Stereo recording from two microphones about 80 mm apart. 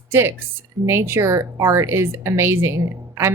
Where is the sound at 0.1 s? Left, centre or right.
Right.